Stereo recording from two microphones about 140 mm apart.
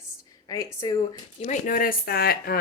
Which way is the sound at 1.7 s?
90° left.